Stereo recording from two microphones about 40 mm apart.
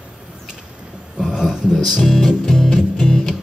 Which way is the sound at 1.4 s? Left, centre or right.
Centre.